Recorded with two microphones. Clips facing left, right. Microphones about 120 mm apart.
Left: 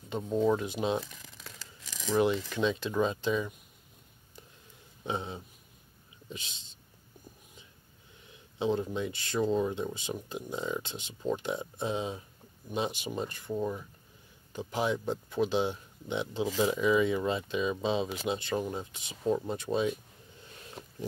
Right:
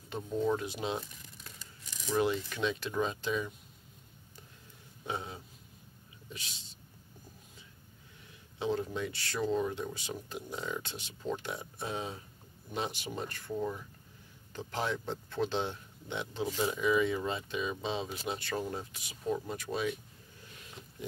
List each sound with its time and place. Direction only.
0.1 s speech: 25° left (ahead or behind)
1.0 s a sound: 90° left
2.5 s speech: 20° left (ahead or behind)
5.0 s speech: 20° left (ahead or behind)
8.5 s speech: 20° left (ahead or behind)
20.8 s pig: 60° left (ahead or behind)